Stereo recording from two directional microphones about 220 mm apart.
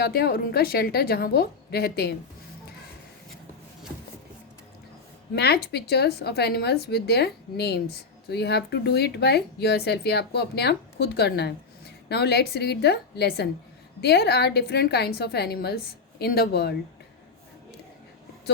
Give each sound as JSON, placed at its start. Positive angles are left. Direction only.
{"t": 0.0, "sound": "a woman's voice", "side_deg": 45}
{"t": 5.3, "sound": "a woman's voice", "side_deg": 50}